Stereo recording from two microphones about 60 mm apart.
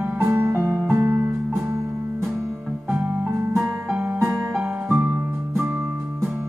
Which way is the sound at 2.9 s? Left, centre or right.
Right.